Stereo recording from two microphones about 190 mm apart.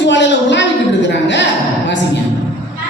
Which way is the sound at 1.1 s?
70° left (ahead or behind).